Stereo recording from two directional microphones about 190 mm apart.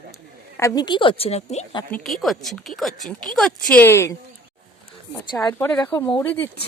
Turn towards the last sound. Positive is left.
turn(degrees=10)  # may be behind; listen again after turning